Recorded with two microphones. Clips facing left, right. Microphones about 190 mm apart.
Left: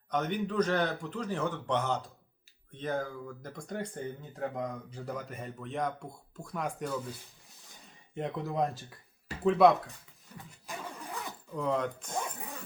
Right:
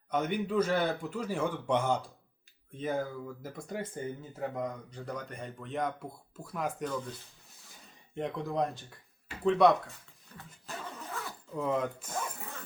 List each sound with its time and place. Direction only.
0.1 s a man's voice: 10° right (ahead or behind); by 7.1 s 5° left (ahead or behind)
8.1 s speech: centre (ahead or behind)
10.3 s vehicle: 15° left (ahead or behind)
11.5 s speech: 5° right (ahead or behind)